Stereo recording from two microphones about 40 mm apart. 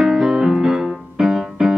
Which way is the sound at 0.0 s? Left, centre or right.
Centre.